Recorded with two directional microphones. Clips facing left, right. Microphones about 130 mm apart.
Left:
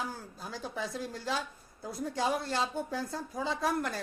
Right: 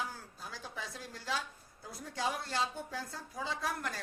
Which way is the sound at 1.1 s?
30° left (ahead or behind).